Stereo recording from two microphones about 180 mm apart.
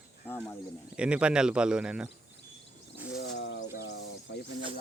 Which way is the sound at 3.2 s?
75° left (ahead or behind).